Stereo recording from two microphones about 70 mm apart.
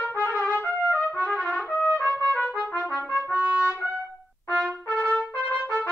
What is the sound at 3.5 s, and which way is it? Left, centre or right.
Trumpet, right.